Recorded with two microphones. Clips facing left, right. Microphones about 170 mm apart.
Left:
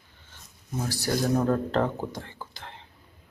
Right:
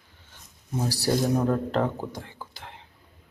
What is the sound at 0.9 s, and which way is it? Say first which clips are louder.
Speech: right 3 dB; 35° right (ahead or behind).